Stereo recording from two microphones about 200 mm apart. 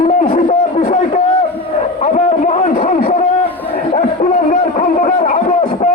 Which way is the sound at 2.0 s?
35° left (ahead or behind).